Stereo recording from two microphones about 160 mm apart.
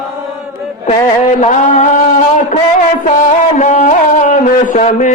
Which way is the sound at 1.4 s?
50° left (ahead or behind).